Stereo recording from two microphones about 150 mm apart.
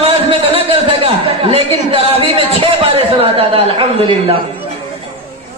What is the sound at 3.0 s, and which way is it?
Speech, 40° right (ahead or behind).